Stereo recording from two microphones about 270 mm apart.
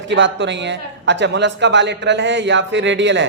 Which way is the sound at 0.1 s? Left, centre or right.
Right.